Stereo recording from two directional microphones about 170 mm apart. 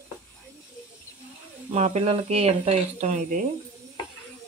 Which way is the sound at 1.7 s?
40° right (ahead or behind).